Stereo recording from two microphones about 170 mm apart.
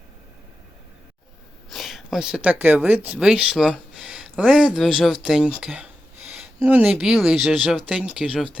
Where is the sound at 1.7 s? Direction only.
Centre (ahead or behind).